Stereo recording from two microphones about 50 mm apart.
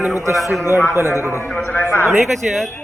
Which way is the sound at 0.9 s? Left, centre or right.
Left.